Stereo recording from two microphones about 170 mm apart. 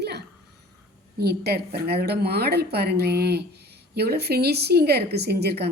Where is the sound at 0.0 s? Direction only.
75° right (ahead or behind).